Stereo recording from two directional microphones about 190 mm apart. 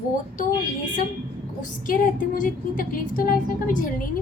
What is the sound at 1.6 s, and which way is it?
Speech, 45° left (ahead or behind).